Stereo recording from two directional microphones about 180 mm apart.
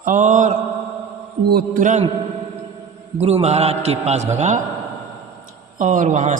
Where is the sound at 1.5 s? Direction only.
65° right (ahead or behind).